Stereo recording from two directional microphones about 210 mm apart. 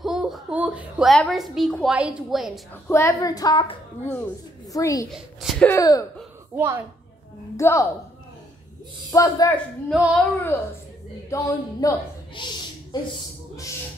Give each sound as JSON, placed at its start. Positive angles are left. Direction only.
{"t": 0.0, "sound": "a child's voice", "side_deg": 0}
{"t": 2.9, "sound": "speech", "side_deg": 15}
{"t": 4.7, "sound": "speech", "side_deg": 15}
{"t": 5.1, "sound": "a child's voice", "side_deg": 0}
{"t": 5.7, "sound": "speech", "side_deg": 15}
{"t": 6.5, "sound": "a woman's voice", "side_deg": -10}
{"t": 7.5, "sound": "speech", "side_deg": 15}
{"t": 9.1, "sound": "speech", "side_deg": 15}
{"t": 9.8, "sound": "speech", "side_deg": 0}
{"t": 11.2, "sound": "speech", "side_deg": 15}